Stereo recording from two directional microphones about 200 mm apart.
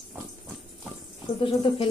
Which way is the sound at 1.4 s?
25° left (ahead or behind).